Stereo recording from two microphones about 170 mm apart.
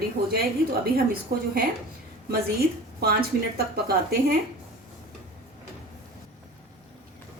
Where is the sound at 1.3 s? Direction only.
65° right (ahead or behind).